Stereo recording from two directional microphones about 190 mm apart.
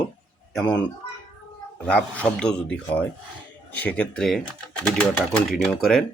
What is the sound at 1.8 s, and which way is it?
Speech, 5° left (ahead or behind).